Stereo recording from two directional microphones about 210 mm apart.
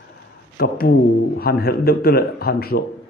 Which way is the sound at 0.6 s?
45° left (ahead or behind).